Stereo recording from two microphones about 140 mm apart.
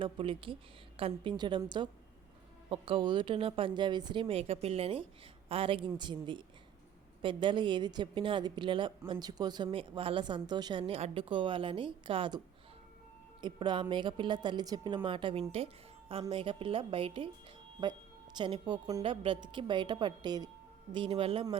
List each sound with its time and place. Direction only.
0.0 s a woman's voice: 40° right (ahead or behind)
13.4 s a woman's voice: 35° right (ahead or behind)
18.3 s a woman's voice: 35° right (ahead or behind)